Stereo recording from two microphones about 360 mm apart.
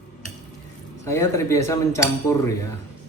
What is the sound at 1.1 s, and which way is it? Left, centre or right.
Speech, centre.